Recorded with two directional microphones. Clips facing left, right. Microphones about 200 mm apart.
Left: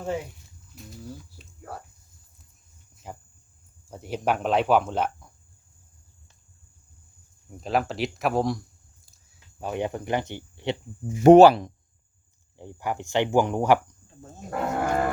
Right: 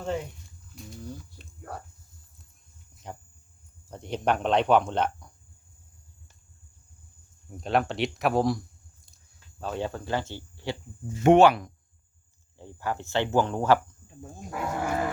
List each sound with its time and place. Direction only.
0.0 s speech: 5° left (ahead or behind)
2.9 s a sound: 5° left (ahead or behind)
3.8 s speech: 5° left (ahead or behind)
7.5 s speech: centre (ahead or behind)
9.6 s speech: 15° left (ahead or behind)
11.2 s speech: 35° left (ahead or behind)
12.5 s speech: 15° left (ahead or behind)
14.8 s dog: 55° left (ahead or behind)